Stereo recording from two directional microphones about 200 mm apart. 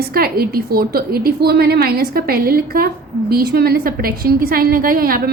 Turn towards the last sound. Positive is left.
turn(degrees=-45)  # may be behind; listen again after turning